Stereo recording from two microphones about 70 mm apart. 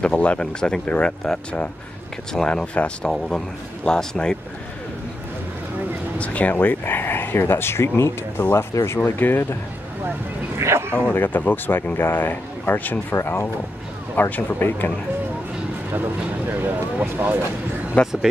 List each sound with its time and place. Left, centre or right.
0.0 s speech: centre
6.1 s speech: centre
10.6 s speech: right
11.1 s speech: left
13.1 s speech: left
16.4 s speech: right
18.0 s speech: centre